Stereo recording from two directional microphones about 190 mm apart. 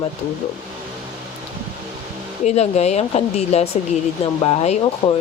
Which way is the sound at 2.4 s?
35° left (ahead or behind).